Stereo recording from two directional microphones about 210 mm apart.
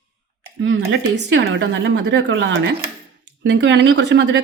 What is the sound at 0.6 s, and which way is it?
A woman's voice, 60° right (ahead or behind).